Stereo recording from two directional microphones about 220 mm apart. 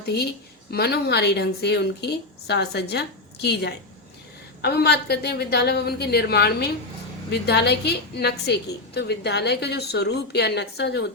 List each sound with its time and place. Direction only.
0.0 s a woman's voice: 45° left (ahead or behind)